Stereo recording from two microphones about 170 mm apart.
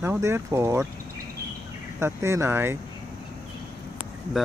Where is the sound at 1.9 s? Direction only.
15° right (ahead or behind).